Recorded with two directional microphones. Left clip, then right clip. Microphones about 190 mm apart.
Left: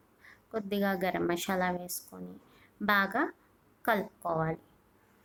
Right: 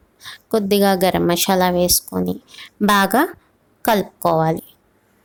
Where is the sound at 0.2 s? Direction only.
45° right (ahead or behind).